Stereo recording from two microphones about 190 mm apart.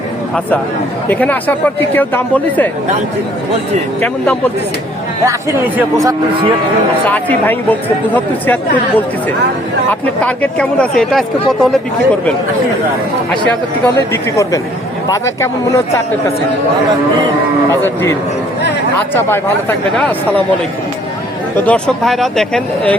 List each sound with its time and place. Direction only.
1.1 s speech: 10° left (ahead or behind)
5.2 s speech: 15° right (ahead or behind)
7.0 s speech: 10° left (ahead or behind)
9.9 s speech: 5° left (ahead or behind)
13.5 s speech: 15° left (ahead or behind)
17.7 s speech: 15° left (ahead or behind)
19.1 s speech: 10° left (ahead or behind)
21.6 s speech: 5° left (ahead or behind)